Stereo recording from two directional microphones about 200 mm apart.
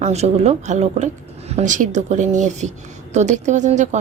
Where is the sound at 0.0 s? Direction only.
35° right (ahead or behind).